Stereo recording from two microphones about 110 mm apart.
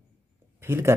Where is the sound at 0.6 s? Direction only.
20° right (ahead or behind).